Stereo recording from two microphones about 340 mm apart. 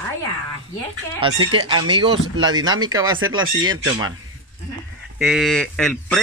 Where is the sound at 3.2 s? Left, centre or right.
Right.